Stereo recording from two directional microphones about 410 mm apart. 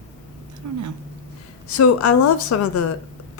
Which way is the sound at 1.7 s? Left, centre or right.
Left.